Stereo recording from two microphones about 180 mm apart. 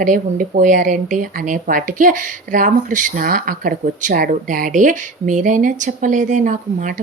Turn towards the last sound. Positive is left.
turn(degrees=-45)  # may be behind; listen again after turning